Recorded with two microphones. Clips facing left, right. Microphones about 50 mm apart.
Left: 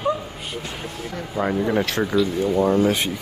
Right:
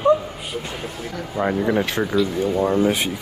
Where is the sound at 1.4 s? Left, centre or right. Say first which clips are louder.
Right 1 dB; right.